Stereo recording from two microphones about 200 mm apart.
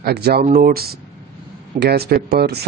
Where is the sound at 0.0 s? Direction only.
55° right (ahead or behind).